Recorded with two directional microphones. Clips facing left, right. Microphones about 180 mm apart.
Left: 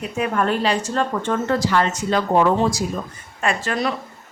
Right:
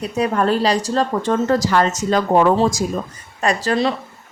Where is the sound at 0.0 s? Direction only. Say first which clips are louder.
Right 3 dB; 35° right (ahead or behind).